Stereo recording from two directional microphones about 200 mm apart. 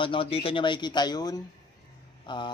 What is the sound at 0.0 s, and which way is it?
Speech, 25° left (ahead or behind).